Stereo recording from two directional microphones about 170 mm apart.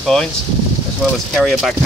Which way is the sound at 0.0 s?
Centre (ahead or behind).